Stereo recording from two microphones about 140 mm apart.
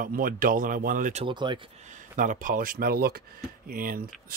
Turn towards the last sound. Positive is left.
turn(degrees=-90)